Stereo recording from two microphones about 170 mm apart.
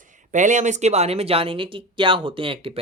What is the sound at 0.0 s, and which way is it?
Speech, 50° right (ahead or behind).